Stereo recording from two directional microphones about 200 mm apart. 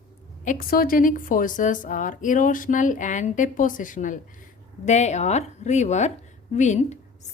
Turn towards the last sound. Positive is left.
turn(degrees=35)  # may be behind; listen again after turning